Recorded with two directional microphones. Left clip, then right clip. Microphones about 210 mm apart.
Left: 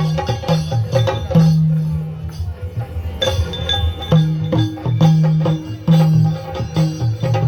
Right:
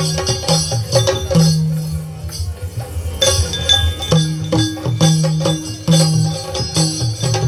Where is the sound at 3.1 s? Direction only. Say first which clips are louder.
Right 4 dB; 40° left (ahead or behind).